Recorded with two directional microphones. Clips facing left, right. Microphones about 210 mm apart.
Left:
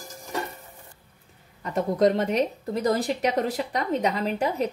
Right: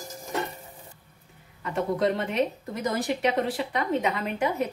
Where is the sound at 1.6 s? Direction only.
40° left (ahead or behind).